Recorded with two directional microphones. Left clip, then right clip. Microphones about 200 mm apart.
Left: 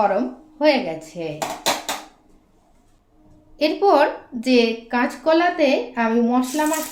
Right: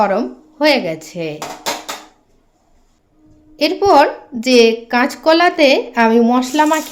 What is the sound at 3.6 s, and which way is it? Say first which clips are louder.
A woman's voice: right 5 dB; 30° right (ahead or behind).